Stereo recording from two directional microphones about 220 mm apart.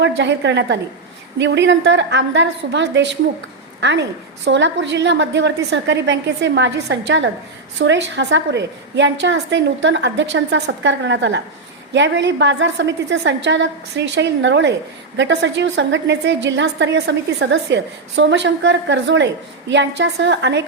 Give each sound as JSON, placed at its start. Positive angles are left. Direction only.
{"t": 0.0, "sound": "a woman's voice", "side_deg": -55}